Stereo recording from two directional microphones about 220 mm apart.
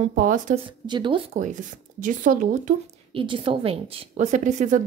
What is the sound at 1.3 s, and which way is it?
Speech, 35° right (ahead or behind).